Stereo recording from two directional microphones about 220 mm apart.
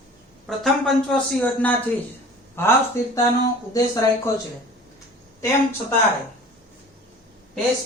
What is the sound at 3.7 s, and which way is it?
Speech, 15° left (ahead or behind).